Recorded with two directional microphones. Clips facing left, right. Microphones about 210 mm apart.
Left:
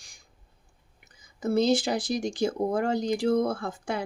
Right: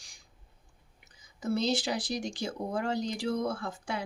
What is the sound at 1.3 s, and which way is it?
Speech, 50° left (ahead or behind).